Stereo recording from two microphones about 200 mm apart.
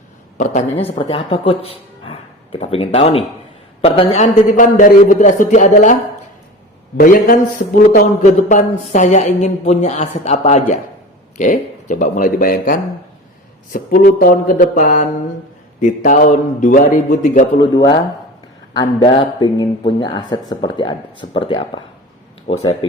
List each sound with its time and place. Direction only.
0.3 s a woman's voice: 35° left (ahead or behind)
7.0 s a sound: 45° left (ahead or behind)
7.8 s a woman's voice: 40° left (ahead or behind)
13.7 s a sound: 45° left (ahead or behind)
15.8 s a woman's voice: 40° left (ahead or behind)
17.6 s speech: 20° left (ahead or behind)